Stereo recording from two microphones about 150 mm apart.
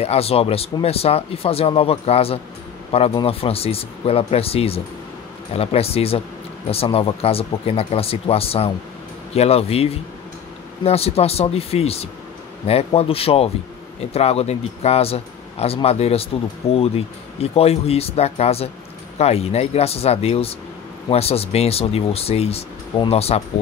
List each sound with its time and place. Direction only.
0.0 s speech: 40° left (ahead or behind)